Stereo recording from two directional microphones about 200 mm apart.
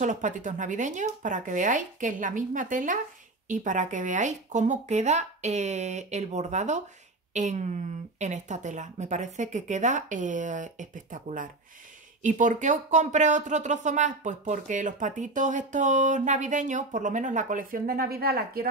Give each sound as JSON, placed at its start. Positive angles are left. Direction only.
{"t": 0.0, "sound": "speech", "side_deg": -40}